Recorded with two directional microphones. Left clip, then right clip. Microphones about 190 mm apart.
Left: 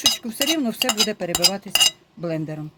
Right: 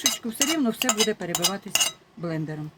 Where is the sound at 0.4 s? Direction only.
25° left (ahead or behind).